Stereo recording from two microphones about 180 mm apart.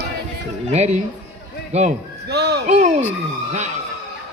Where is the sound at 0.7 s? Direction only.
40° right (ahead or behind).